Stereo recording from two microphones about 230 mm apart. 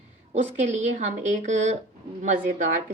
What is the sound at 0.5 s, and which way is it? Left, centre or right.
A woman's voice, right.